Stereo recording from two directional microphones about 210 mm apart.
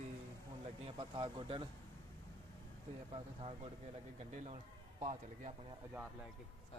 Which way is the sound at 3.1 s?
25° right (ahead or behind).